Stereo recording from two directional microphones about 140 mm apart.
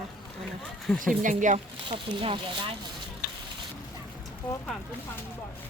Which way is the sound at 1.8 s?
40° right (ahead or behind).